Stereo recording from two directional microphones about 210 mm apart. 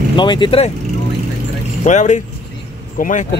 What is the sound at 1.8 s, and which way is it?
Speech, 35° left (ahead or behind).